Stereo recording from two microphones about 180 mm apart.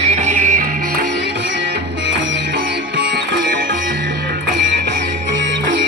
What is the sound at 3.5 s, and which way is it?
Music, 55° right (ahead or behind).